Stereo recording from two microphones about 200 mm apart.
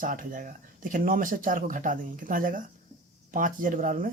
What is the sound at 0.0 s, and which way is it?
Speech, 40° right (ahead or behind).